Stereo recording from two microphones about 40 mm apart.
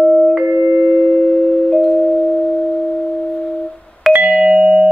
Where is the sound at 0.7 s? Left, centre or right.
Right.